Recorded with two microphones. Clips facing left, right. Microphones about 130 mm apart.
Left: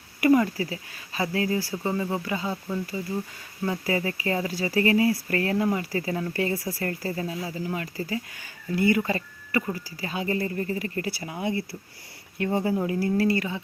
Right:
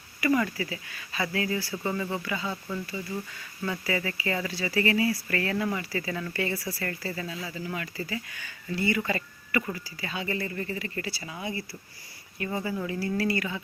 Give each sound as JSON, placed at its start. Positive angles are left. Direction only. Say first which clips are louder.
{"t": 0.5, "sound": "speech", "louder": "left 3 dB", "side_deg": 35}
{"t": 9.0, "sound": "speech", "louder": "left 2 dB", "side_deg": 35}
{"t": 11.1, "sound": "speech", "louder": "left 6 dB", "side_deg": 55}
{"t": 12.9, "sound": "speech", "louder": "left 3 dB", "side_deg": 45}